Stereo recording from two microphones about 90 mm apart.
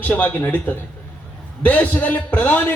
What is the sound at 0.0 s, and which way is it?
Speech, 20° left (ahead or behind).